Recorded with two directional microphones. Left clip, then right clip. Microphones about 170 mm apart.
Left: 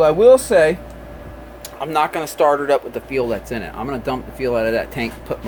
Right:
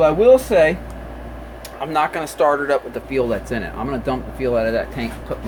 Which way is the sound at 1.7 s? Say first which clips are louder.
Left 1 dB; 40° left (ahead or behind).